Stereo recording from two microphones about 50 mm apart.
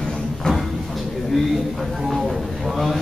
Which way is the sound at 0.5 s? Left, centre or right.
Centre.